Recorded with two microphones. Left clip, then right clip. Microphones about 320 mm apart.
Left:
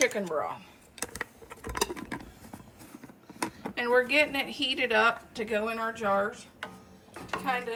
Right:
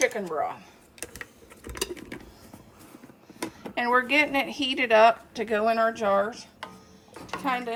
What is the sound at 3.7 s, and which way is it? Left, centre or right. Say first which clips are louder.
Speech: right 2 dB; centre.